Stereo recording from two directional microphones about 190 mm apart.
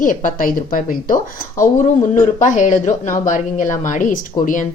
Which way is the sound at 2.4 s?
40° left (ahead or behind).